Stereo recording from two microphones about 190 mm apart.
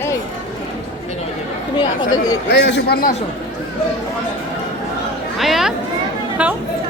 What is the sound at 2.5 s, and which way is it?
Speech, 65° left (ahead or behind).